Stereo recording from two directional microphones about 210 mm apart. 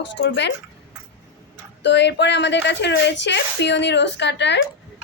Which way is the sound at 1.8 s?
55° left (ahead or behind).